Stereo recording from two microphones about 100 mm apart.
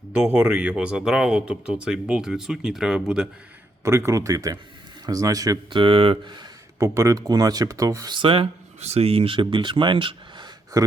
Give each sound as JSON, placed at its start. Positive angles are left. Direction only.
{"t": 0.1, "sound": "speech", "side_deg": -10}
{"t": 3.8, "sound": "speech", "side_deg": -30}
{"t": 5.7, "sound": "speech", "side_deg": -65}
{"t": 6.7, "sound": "speech", "side_deg": -30}
{"t": 8.1, "sound": "speech", "side_deg": -60}